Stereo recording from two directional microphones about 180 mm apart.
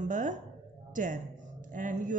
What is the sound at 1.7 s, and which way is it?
Speech, 45° right (ahead or behind).